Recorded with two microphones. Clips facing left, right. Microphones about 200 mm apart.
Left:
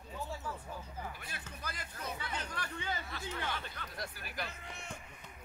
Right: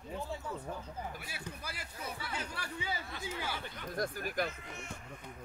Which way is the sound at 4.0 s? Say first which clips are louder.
Right 9 dB; 45° right (ahead or behind).